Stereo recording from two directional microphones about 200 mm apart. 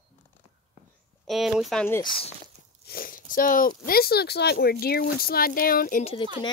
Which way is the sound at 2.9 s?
45° left (ahead or behind).